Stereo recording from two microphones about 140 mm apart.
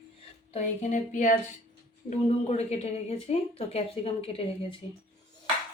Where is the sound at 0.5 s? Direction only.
60° left (ahead or behind); by 4.8 s 45° left (ahead or behind).